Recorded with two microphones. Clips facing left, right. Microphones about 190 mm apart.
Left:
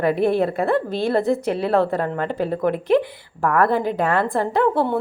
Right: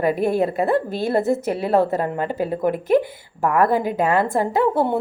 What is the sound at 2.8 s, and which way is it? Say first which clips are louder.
Speech: even; 45° right (ahead or behind).